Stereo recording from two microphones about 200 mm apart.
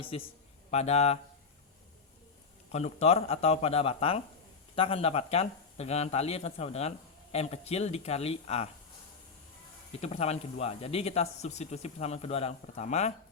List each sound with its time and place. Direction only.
0.0 s a man's voice: 25° left (ahead or behind)
2.7 s speech: 30° left (ahead or behind)
10.0 s speech: 30° left (ahead or behind)